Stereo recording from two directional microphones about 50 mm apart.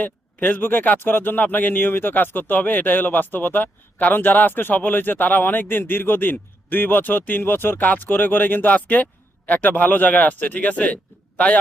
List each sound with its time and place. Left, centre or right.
0.0 s speech: left